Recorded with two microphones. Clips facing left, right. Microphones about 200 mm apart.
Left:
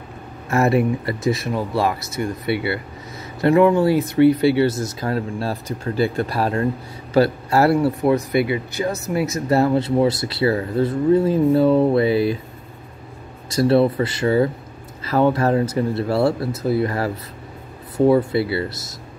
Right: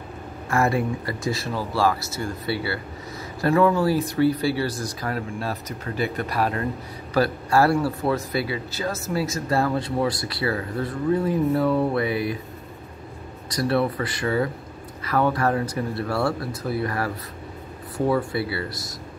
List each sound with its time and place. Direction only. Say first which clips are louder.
0.5 s speech: left 5 dB; 25° left (ahead or behind)
13.5 s speech: left 7 dB; 30° left (ahead or behind)